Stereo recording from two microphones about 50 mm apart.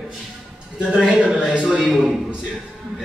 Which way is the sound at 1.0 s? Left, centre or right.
Centre.